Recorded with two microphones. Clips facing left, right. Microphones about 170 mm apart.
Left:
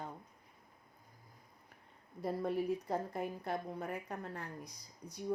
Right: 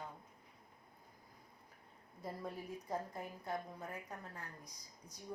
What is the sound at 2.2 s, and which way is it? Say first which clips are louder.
Speech: left 10 dB; 70° left (ahead or behind).